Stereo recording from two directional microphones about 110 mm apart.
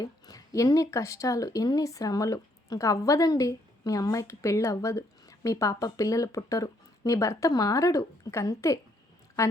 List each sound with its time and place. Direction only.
0.0 s speech: 35° left (ahead or behind)